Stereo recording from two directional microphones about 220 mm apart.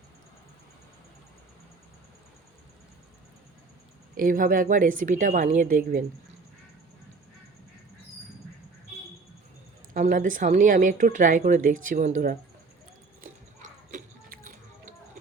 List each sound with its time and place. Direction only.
4.2 s speech: 40° right (ahead or behind)
9.9 s speech: 35° right (ahead or behind)
13.2 s a sound: 35° right (ahead or behind)